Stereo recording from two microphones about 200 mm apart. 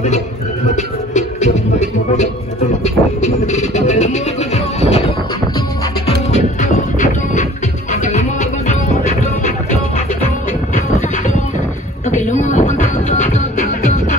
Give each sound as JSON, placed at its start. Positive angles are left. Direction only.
{"t": 0.7, "sound": "music", "side_deg": 35}
{"t": 6.3, "sound": "music", "side_deg": 40}
{"t": 11.0, "sound": "music", "side_deg": 35}